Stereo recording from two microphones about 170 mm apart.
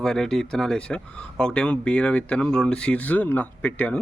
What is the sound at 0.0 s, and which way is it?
Speech, 5° left (ahead or behind).